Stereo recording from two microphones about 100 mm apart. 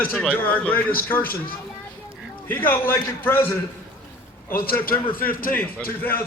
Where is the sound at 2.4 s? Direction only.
20° left (ahead or behind).